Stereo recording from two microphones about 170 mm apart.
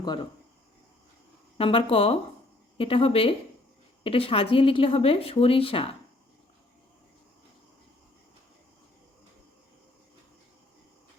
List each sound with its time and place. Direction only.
0.0 s speech: 25° left (ahead or behind)
1.5 s speech: 35° left (ahead or behind)